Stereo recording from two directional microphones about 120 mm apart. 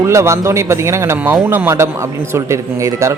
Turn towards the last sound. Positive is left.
turn(degrees=-25)  # may be behind; listen again after turning